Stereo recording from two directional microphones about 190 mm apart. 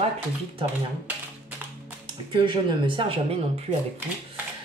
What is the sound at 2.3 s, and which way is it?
Speech, 25° right (ahead or behind).